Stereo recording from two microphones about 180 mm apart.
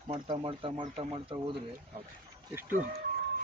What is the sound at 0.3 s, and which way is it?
Speech, 25° right (ahead or behind).